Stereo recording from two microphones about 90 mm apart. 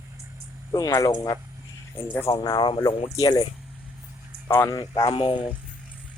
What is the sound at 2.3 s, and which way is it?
Speech, 55° left (ahead or behind).